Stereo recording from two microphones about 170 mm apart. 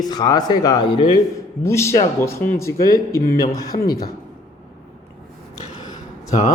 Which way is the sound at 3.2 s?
60° left (ahead or behind).